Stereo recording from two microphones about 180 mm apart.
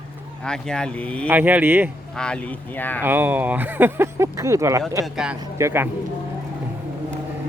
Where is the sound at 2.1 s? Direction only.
5° left (ahead or behind).